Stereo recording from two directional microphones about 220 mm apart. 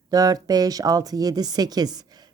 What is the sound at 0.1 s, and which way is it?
Speech, 15° right (ahead or behind).